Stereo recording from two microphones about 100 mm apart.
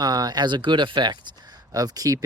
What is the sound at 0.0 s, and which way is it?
Speech, 40° right (ahead or behind).